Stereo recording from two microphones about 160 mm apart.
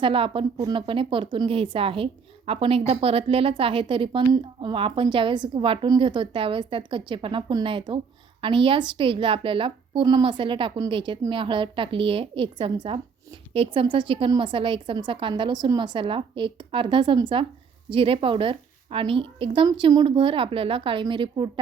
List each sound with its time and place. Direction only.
0.0 s a woman's voice: 35° right (ahead or behind)